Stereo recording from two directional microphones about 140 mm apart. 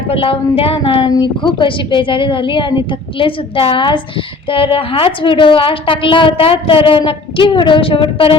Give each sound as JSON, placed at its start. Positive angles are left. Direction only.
{"t": 0.1, "sound": "a woman's voice", "side_deg": 40}